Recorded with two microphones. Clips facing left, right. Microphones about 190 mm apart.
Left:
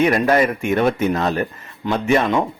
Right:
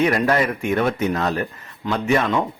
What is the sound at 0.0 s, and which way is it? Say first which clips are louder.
A man's voice: left 3 dB; 25° left (ahead or behind).